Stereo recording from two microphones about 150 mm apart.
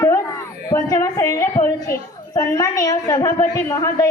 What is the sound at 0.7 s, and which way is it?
A woman's voice, 20° left (ahead or behind).